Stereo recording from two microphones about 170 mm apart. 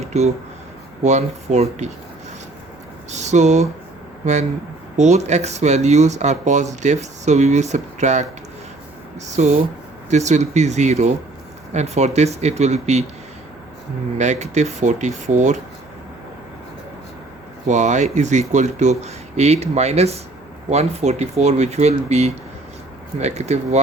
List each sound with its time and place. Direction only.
1.0 s speech: 40° right (ahead or behind)
3.1 s speech: 45° right (ahead or behind)
9.2 s speech: 45° right (ahead or behind)
14.2 s speech: 45° right (ahead or behind)
17.7 s speech: 45° right (ahead or behind)